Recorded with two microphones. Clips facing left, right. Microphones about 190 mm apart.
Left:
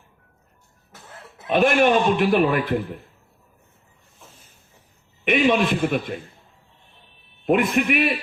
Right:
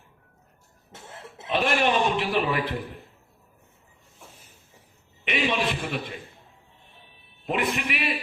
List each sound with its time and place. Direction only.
0.9 s cough: 25° right (ahead or behind)
1.5 s a man's voice: 50° left (ahead or behind)
5.2 s a man's voice: 50° left (ahead or behind)
7.4 s a man's voice: 50° left (ahead or behind)